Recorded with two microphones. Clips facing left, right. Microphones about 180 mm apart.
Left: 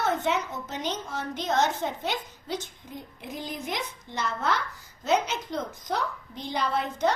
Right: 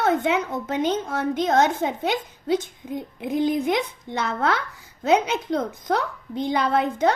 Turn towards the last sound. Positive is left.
turn(degrees=-55)  # may be behind; listen again after turning